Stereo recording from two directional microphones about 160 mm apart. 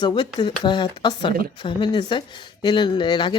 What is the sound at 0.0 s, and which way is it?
Speech, 30° left (ahead or behind).